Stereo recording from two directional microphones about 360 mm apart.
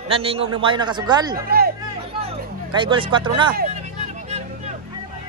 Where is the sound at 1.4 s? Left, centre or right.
Right.